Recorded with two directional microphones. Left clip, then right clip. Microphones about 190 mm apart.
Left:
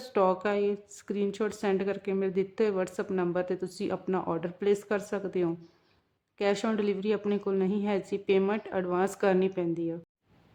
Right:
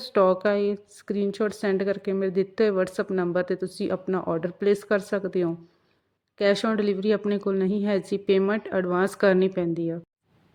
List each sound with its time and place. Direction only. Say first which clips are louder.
0.0 s speech: right 6 dB; 20° right (ahead or behind)